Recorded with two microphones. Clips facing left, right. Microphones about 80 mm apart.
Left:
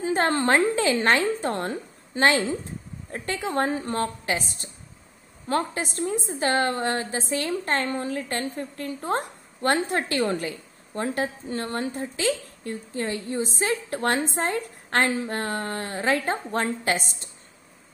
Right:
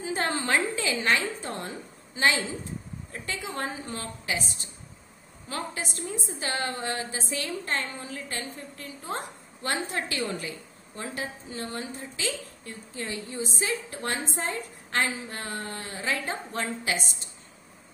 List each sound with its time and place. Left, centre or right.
0.0 s a woman's voice: left
5.9 s a woman's voice: left